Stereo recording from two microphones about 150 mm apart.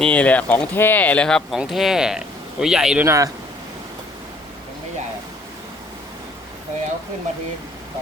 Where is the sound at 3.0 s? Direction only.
20° right (ahead or behind).